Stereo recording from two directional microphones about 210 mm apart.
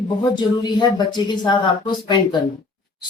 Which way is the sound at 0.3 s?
20° left (ahead or behind).